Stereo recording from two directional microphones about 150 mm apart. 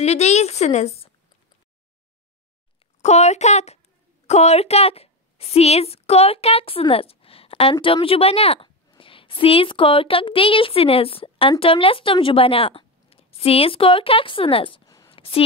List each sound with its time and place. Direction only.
0.0 s a woman's voice: 45° left (ahead or behind)
3.0 s a woman's voice: 50° left (ahead or behind)
15.0 s a sound: 35° left (ahead or behind)